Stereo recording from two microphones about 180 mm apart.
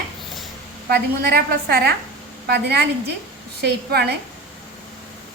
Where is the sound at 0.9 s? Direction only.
60° right (ahead or behind).